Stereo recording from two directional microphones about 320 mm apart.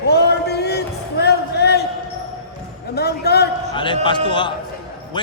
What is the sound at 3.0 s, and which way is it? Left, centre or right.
Speech, left.